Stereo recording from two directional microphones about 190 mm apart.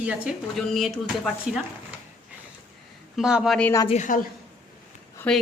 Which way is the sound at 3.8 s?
40° left (ahead or behind).